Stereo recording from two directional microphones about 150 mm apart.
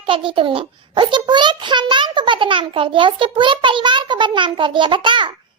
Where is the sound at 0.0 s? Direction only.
35° right (ahead or behind).